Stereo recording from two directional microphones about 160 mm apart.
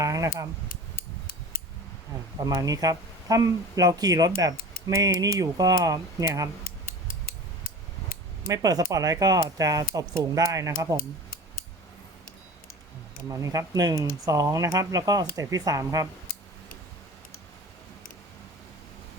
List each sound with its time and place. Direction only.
0.0 s a sound: 20° right (ahead or behind)
2.4 s speech: 20° right (ahead or behind)
6.7 s mechanisms: 60° left (ahead or behind)
8.4 s speech: 20° right (ahead or behind)
13.2 s speech: 20° right (ahead or behind)